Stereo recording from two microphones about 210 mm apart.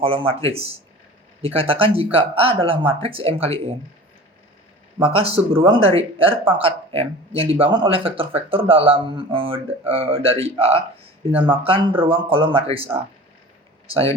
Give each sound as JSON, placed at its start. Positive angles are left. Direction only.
{"t": 0.0, "sound": "speech", "side_deg": -30}
{"t": 5.0, "sound": "speech", "side_deg": -30}